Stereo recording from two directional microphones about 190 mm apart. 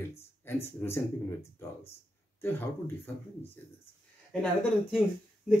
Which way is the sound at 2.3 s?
10° left (ahead or behind).